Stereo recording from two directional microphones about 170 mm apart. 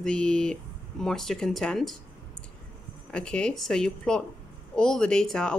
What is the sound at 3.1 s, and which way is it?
Speech, 5° left (ahead or behind).